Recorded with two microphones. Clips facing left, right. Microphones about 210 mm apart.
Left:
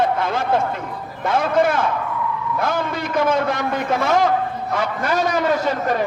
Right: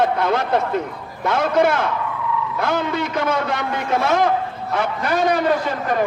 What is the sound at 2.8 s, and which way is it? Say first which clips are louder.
A man's voice: left 1 dB; 50° left (ahead or behind).